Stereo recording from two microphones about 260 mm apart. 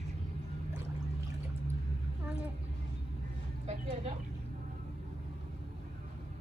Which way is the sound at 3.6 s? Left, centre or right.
Right.